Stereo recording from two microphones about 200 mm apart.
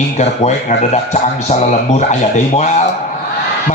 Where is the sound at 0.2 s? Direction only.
35° left (ahead or behind).